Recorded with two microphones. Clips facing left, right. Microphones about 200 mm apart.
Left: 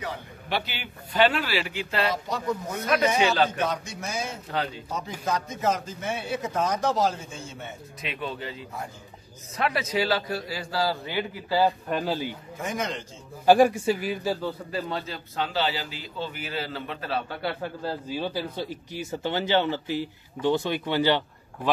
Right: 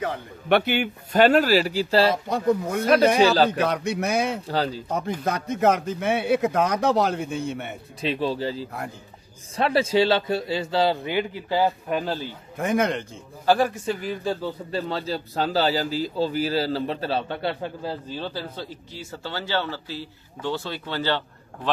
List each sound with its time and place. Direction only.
0.0 s a man's voice: 55° right (ahead or behind); by 2.1 s 30° right (ahead or behind)
2.2 s a man's voice: 55° right (ahead or behind)
2.8 s a man's voice: 30° right (ahead or behind)
3.4 s a man's voice: 65° right (ahead or behind)
4.5 s a man's voice: 35° right (ahead or behind)
4.9 s a man's voice: 60° right (ahead or behind)
8.0 s a man's voice: 30° right (ahead or behind)
11.9 s speech: centre (ahead or behind)
12.5 s a man's voice: 60° right (ahead or behind)
13.5 s speech: 10° left (ahead or behind)
14.7 s a man's voice: 30° right (ahead or behind)
18.0 s speech: 10° left (ahead or behind)